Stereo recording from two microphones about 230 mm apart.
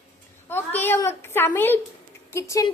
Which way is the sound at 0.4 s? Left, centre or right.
Centre.